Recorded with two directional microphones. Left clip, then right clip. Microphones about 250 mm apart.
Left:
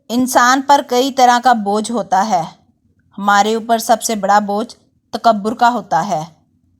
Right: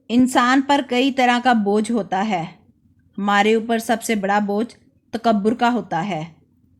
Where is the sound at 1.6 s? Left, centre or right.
Centre.